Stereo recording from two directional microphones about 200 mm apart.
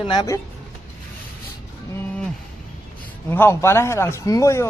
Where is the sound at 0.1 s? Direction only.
20° left (ahead or behind).